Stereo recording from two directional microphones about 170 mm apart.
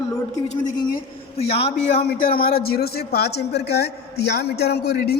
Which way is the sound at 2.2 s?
60° left (ahead or behind).